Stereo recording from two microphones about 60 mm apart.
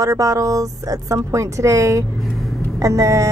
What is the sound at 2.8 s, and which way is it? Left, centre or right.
Speech, right.